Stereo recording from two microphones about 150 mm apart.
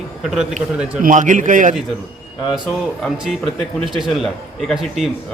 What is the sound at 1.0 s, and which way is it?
Speech, 60° right (ahead or behind).